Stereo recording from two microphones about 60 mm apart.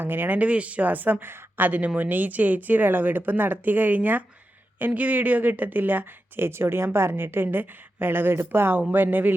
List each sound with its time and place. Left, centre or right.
0.0 s speech: right